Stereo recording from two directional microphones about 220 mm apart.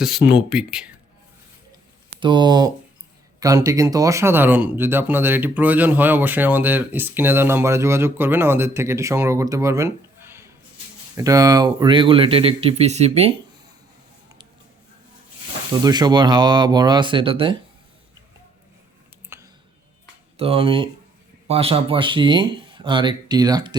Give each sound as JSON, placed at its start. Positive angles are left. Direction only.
{"t": 0.3, "sound": "speech", "side_deg": -5}
{"t": 2.2, "sound": "speech", "side_deg": -20}
{"t": 15.8, "sound": "speech", "side_deg": -20}
{"t": 19.3, "sound": "a sound", "side_deg": -10}
{"t": 20.3, "sound": "speech", "side_deg": -25}